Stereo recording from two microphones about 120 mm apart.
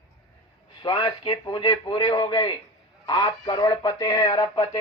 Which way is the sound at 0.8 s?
40° left (ahead or behind).